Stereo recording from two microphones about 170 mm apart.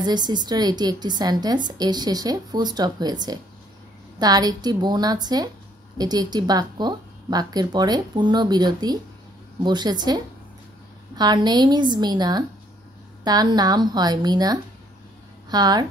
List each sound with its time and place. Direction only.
0.0 s a woman's voice: 25° right (ahead or behind)